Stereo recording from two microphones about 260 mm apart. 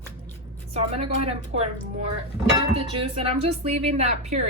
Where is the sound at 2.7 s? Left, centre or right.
Right.